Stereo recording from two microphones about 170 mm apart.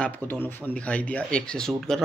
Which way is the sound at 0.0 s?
10° left (ahead or behind).